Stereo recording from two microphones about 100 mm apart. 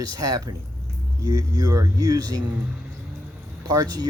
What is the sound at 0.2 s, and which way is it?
Speech, 40° right (ahead or behind).